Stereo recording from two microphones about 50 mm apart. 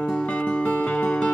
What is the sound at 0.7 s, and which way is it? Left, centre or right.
Music, left.